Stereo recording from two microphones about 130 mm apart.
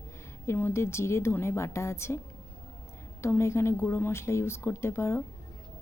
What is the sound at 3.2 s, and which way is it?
Speech, 20° left (ahead or behind).